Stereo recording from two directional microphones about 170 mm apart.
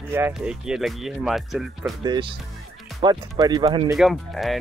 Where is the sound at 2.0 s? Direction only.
25° right (ahead or behind).